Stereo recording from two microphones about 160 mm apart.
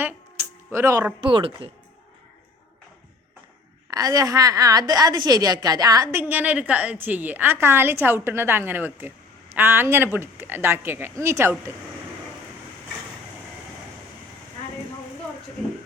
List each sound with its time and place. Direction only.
0.7 s a woman's voice: 15° right (ahead or behind)
1.2 s speech: 35° right (ahead or behind)
3.8 s a woman's voice: 20° right (ahead or behind)
15.6 s a sound: centre (ahead or behind)